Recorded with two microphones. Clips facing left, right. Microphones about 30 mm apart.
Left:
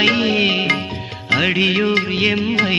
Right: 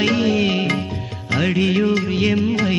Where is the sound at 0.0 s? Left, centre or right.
Left.